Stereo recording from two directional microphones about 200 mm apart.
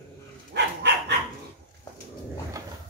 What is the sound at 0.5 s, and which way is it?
Dog, 55° right (ahead or behind).